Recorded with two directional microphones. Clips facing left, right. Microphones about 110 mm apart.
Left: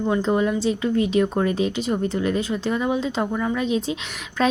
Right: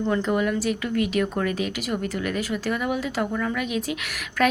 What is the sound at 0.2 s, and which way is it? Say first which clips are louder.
A woman's voice: left 3 dB; 25° left (ahead or behind).